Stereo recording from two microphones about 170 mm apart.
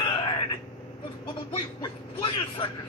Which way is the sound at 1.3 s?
30° left (ahead or behind).